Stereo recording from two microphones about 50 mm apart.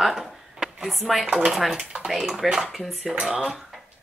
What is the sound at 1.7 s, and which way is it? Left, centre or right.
Speech, centre.